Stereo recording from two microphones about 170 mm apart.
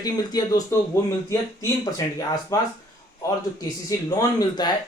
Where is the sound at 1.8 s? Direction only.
20° left (ahead or behind).